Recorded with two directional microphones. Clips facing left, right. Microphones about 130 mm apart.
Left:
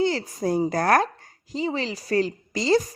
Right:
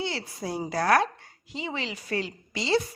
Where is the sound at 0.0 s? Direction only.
45° left (ahead or behind).